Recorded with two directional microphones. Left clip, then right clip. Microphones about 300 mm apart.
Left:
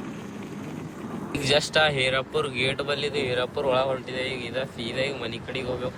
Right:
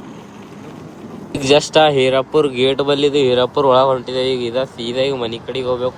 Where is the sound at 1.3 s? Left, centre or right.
Right.